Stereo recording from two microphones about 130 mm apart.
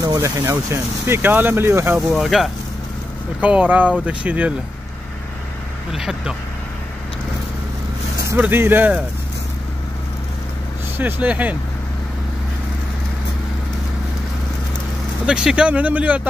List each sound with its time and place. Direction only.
0.0 s speech: 30° right (ahead or behind)
2.0 s speech: centre (ahead or behind)
5.9 s speech: 5° right (ahead or behind)
8.4 s speech: 15° right (ahead or behind)
11.0 s speech: 15° right (ahead or behind)
15.2 s speech: 5° right (ahead or behind)